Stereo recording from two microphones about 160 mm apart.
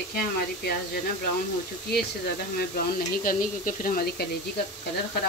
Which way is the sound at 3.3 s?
60° left (ahead or behind).